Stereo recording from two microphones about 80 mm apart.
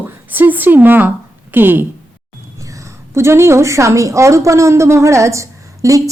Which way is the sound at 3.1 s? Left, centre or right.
Right.